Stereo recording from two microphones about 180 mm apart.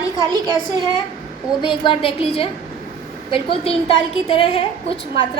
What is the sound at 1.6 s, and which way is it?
A woman's voice, 30° left (ahead or behind).